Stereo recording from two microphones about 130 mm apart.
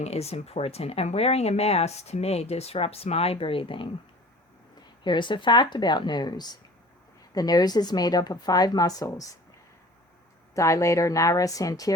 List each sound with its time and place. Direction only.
0.0 s speech: 55° left (ahead or behind)
5.0 s speech: 35° left (ahead or behind)
10.5 s speech: 25° left (ahead or behind)